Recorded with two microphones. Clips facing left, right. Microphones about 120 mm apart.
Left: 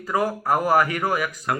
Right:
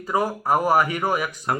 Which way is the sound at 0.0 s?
25° right (ahead or behind).